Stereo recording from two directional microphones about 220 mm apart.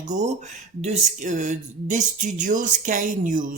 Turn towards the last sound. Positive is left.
turn(degrees=-40)  # may be behind; listen again after turning